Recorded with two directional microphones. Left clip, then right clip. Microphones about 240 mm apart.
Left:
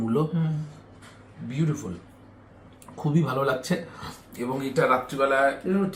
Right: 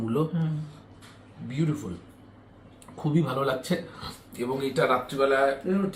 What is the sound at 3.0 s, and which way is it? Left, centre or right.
Speech, centre.